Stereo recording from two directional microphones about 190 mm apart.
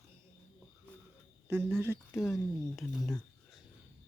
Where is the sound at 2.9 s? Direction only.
Centre (ahead or behind).